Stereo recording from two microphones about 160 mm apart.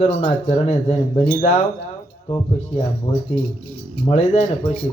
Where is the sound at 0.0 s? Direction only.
40° left (ahead or behind).